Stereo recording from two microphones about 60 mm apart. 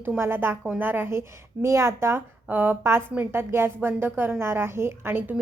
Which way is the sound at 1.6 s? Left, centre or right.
Right.